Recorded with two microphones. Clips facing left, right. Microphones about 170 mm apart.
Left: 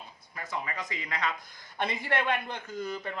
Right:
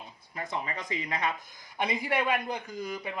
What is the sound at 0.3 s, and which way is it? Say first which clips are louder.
Speech: right 1 dB; 25° right (ahead or behind).